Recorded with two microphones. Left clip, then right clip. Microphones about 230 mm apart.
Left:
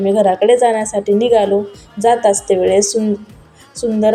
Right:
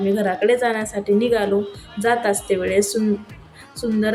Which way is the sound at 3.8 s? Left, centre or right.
Centre.